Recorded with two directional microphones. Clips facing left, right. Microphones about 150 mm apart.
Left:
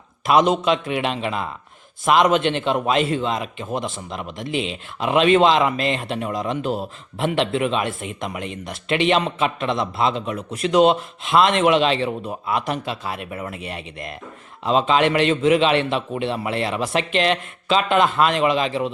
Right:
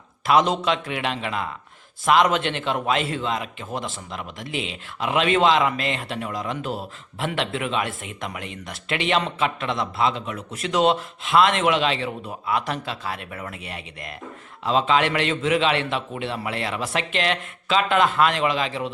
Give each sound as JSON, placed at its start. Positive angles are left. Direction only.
{"t": 0.3, "sound": "speech", "side_deg": 15}